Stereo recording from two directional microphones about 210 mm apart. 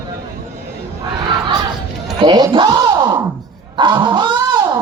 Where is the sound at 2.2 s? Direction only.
20° right (ahead or behind).